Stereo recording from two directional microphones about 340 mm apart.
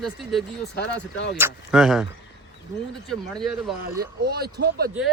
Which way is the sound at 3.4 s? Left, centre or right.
Centre.